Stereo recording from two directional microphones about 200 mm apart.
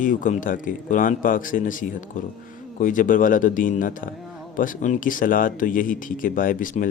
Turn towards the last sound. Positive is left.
turn(degrees=40)  # may be behind; listen again after turning